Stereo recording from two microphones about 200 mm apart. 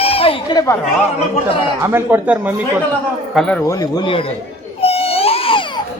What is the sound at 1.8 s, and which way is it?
Speech, 10° right (ahead or behind).